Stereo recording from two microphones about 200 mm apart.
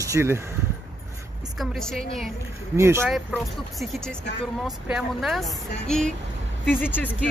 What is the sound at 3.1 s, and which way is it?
Speech, centre (ahead or behind).